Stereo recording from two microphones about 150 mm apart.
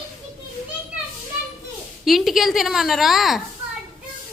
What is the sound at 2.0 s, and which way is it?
A woman's voice, centre (ahead or behind).